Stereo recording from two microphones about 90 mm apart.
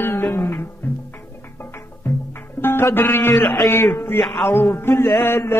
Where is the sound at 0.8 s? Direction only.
20° left (ahead or behind).